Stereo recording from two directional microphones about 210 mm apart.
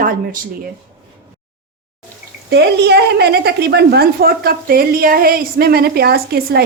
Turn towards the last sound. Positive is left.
turn(degrees=-50)  # may be behind; listen again after turning